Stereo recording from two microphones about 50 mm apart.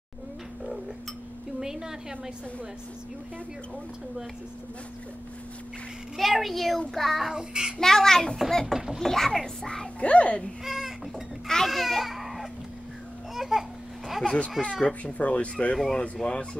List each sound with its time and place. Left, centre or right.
1.6 s a woman's voice: centre
6.1 s a woman's voice: centre
7.3 s child singing: centre
7.8 s a child's voice: centre
8.7 s child singing: centre
9.0 s a child's voice: centre
9.9 s speech: left
10.6 s speech: centre
11.4 s a child's voice: centre
13.3 s babbling: centre
14.2 s a child's voice: centre
16.2 s a child's voice: centre